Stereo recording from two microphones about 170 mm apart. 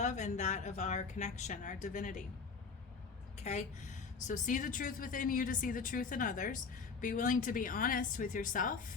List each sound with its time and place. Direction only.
0.0 s a woman's voice: 45° left (ahead or behind)
3.3 s a woman's voice: 45° left (ahead or behind)